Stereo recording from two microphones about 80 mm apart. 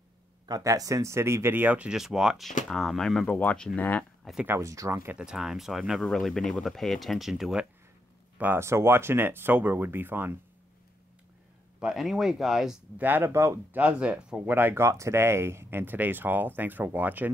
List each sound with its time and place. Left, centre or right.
0.5 s speech: right
1.9 s speech: centre
3.3 s speech: centre
4.2 s a sound: centre
4.5 s speech: right
5.1 s speech: centre
8.5 s speech: right
11.8 s speech: centre
12.9 s speech: right
13.7 s speech: centre
14.5 s speech: right
14.9 s speech: right